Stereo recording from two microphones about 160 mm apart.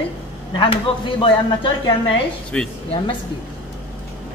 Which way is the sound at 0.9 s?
35° left (ahead or behind).